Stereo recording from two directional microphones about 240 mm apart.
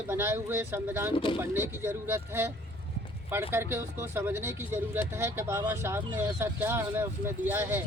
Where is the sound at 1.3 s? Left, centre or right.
Centre.